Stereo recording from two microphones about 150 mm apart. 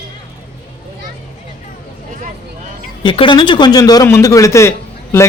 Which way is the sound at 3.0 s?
30° left (ahead or behind).